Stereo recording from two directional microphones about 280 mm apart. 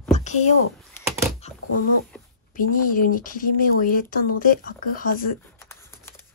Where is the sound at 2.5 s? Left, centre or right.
Left.